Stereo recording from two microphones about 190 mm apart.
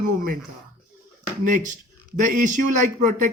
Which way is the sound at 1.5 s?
45° right (ahead or behind).